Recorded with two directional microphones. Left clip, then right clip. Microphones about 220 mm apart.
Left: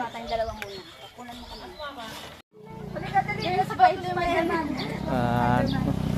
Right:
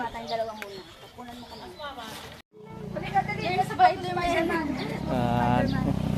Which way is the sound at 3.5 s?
45° right (ahead or behind).